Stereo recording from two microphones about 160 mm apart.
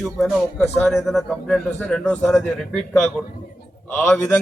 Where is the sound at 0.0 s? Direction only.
Centre (ahead or behind).